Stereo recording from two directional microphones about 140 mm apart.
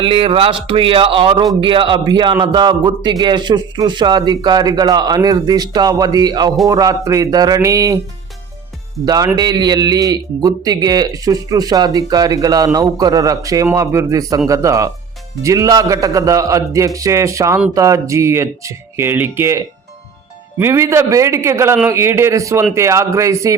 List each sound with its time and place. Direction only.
0.0 s a man's voice: 40° right (ahead or behind); by 7.9 s 25° right (ahead or behind)
9.0 s a man's voice: 30° right (ahead or behind)
20.6 s a man's voice: 20° right (ahead or behind)